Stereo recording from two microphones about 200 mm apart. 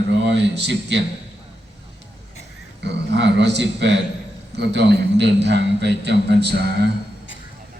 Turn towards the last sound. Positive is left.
turn(degrees=-55)  # may be behind; listen again after turning